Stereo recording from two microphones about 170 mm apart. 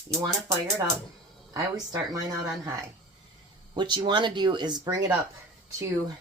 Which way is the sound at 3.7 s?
25° right (ahead or behind).